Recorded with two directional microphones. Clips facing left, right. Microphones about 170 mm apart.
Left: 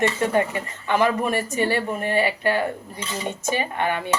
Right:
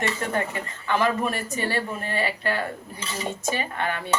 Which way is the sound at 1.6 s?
20° left (ahead or behind).